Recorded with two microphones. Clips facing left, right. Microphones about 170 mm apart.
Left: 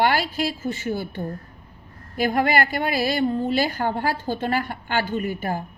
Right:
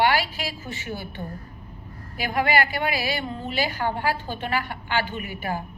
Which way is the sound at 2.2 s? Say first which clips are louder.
Left 3 dB; 45° left (ahead or behind).